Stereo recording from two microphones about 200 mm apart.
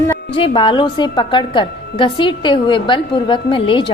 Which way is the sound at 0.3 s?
25° left (ahead or behind).